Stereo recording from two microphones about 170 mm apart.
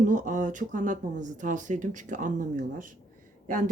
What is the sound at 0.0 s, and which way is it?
A woman's voice, 50° right (ahead or behind).